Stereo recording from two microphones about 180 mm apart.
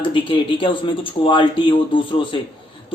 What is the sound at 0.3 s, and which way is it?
Speech, 30° left (ahead or behind).